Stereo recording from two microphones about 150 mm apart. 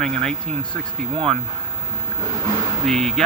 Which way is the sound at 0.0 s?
5° left (ahead or behind).